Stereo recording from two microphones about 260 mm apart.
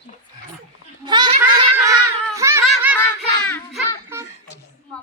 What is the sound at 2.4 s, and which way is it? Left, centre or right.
Giggle, centre.